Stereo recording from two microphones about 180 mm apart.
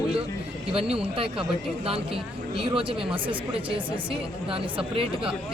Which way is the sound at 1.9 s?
30° right (ahead or behind).